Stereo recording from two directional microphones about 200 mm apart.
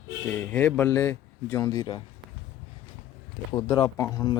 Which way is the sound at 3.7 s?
15° left (ahead or behind).